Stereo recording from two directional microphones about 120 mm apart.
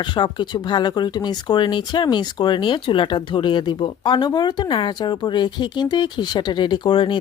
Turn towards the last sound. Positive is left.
turn(degrees=45)  # may be behind; listen again after turning